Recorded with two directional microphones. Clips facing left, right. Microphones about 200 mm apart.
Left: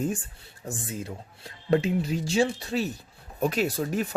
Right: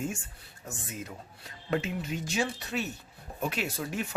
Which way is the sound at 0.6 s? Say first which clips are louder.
Left 6 dB; 30° left (ahead or behind).